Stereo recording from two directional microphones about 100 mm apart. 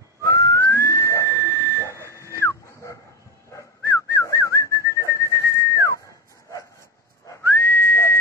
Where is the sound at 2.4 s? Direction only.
30° left (ahead or behind).